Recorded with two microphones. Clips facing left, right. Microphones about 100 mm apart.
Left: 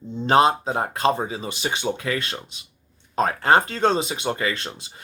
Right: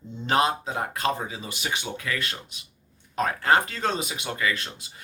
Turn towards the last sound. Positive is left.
turn(degrees=35)  # may be behind; listen again after turning